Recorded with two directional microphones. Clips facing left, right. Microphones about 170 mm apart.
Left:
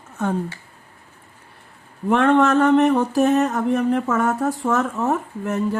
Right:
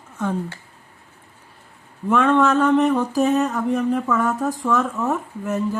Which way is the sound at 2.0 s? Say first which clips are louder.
Left 1 dB; 60° left (ahead or behind).